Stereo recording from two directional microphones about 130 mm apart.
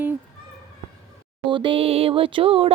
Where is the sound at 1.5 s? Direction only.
40° right (ahead or behind).